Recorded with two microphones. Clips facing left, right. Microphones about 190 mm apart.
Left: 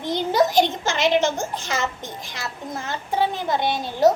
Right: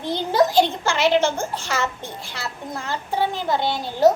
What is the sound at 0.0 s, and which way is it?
A child's voice, 20° left (ahead or behind).